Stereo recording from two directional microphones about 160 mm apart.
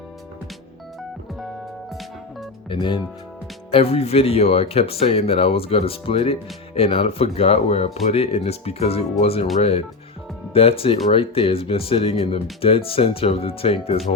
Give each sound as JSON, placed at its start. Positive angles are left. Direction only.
{"t": 2.6, "sound": "speech", "side_deg": 30}